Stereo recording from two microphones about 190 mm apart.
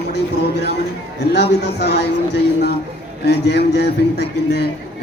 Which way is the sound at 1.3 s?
60° left (ahead or behind).